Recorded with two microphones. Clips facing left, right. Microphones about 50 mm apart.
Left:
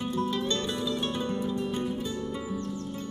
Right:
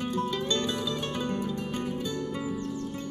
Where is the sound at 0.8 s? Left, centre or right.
Right.